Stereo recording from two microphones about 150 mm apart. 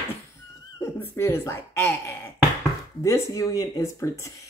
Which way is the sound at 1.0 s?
15° left (ahead or behind).